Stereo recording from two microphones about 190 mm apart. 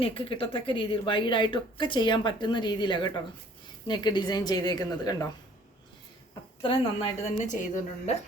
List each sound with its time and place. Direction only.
0.0 s a woman's voice: 30° left (ahead or behind)
6.6 s a woman's voice: 30° left (ahead or behind)